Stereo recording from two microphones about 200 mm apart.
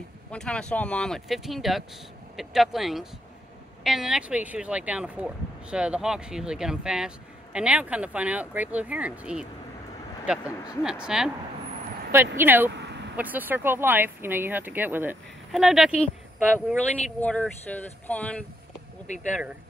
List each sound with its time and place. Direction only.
0.3 s speech: 5° left (ahead or behind)
12.4 s speech: 10° right (ahead or behind)
12.7 s a sound: 60° right (ahead or behind)
13.1 s speech: 10° right (ahead or behind)
17.2 s speech: 5° left (ahead or behind)